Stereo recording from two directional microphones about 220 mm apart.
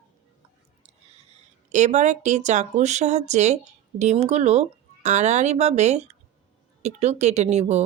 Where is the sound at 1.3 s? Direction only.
35° right (ahead or behind).